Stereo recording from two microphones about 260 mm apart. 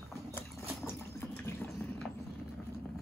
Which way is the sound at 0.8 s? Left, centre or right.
Centre.